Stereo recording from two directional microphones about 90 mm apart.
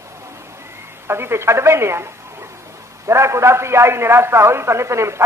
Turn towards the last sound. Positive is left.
turn(degrees=-30)  # may be behind; listen again after turning